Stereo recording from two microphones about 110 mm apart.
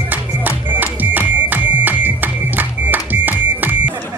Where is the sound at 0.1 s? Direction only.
15° right (ahead or behind).